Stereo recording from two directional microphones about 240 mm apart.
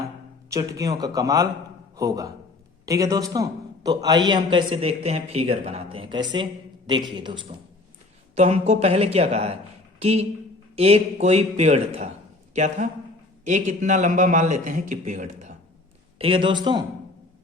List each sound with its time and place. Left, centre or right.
0.5 s a man's voice: centre
8.4 s a man's voice: right